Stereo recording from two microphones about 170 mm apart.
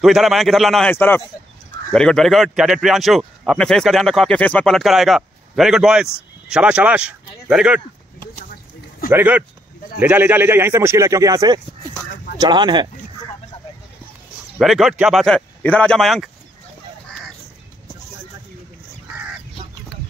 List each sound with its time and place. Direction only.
0.0 s a man's voice: centre (ahead or behind)
9.1 s speech: 10° right (ahead or behind); by 12.8 s 25° right (ahead or behind)
14.6 s a man's voice: centre (ahead or behind)